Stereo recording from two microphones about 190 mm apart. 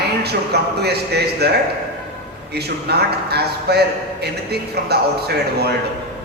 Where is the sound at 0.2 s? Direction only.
60° right (ahead or behind).